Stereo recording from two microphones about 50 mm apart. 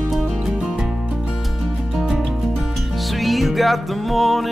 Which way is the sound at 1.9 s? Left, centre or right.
Centre.